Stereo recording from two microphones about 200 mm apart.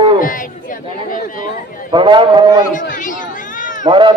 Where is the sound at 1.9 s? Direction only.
25° right (ahead or behind).